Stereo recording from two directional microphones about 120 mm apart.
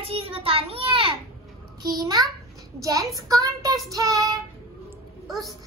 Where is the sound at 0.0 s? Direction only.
55° right (ahead or behind).